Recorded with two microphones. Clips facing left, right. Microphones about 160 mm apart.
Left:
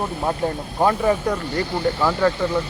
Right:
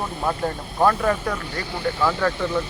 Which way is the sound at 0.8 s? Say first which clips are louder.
Left 2 dB; 20° left (ahead or behind).